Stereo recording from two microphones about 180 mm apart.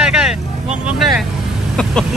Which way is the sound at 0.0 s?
5° right (ahead or behind).